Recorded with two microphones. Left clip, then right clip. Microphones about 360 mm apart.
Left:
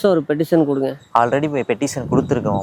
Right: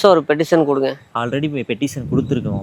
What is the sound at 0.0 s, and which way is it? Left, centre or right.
Speech, right.